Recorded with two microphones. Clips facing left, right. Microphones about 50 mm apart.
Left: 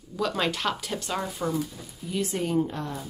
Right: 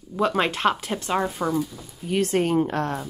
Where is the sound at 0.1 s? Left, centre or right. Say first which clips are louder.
Right 5 dB; right.